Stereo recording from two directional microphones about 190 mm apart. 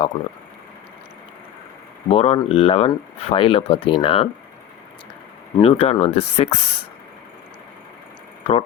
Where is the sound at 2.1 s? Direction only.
30° left (ahead or behind).